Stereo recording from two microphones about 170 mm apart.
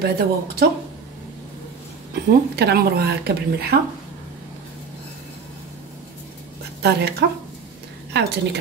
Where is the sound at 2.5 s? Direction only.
70° right (ahead or behind).